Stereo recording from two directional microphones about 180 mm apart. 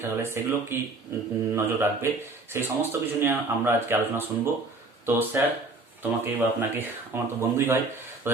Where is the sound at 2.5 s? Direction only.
15° right (ahead or behind).